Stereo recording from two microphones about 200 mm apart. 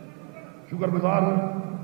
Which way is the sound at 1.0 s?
20° right (ahead or behind).